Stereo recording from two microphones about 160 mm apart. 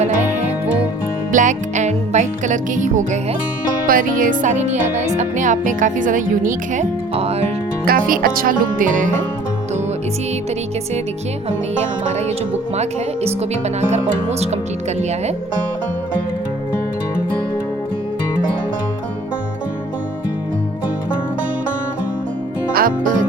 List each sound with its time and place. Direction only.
1.3 s music: 50° right (ahead or behind)
3.8 s speech: 60° right (ahead or behind)
7.2 s music: 40° right (ahead or behind)
7.9 s speech: 65° right (ahead or behind)
12.7 s music: 45° right (ahead or behind)
22.7 s music: 60° right (ahead or behind)